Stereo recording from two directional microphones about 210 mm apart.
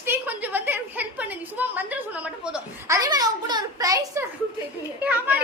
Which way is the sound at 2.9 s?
20° right (ahead or behind).